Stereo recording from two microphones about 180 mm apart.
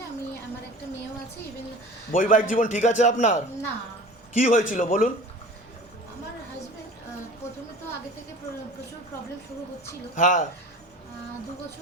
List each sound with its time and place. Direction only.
2.1 s a man's voice: 45° left (ahead or behind)
4.4 s a man's voice: 45° left (ahead or behind)
10.2 s a man's voice: 45° left (ahead or behind)